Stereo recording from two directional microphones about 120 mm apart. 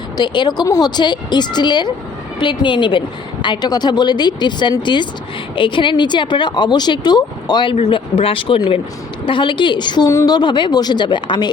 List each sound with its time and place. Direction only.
0.2 s speech: 35° left (ahead or behind)
10.1 s a woman's voice: 25° left (ahead or behind)
10.3 s speech: 40° left (ahead or behind)